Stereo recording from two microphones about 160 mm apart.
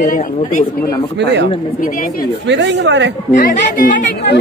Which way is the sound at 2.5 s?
90° right.